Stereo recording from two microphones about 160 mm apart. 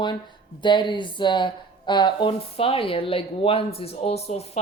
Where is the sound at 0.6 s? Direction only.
30° left (ahead or behind).